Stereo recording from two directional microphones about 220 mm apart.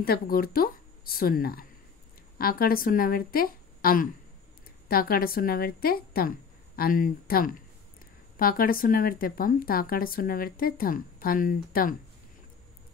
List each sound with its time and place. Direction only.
0.0 s speech: 45° left (ahead or behind)